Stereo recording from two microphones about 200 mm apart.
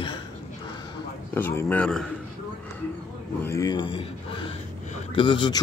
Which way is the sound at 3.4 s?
15° left (ahead or behind).